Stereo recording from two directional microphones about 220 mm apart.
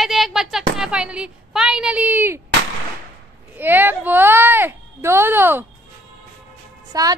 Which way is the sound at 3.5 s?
10° right (ahead or behind).